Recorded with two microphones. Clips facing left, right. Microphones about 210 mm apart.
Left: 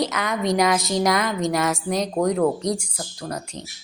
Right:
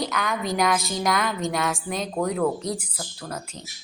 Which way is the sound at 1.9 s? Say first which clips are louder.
Left 6 dB; 20° left (ahead or behind).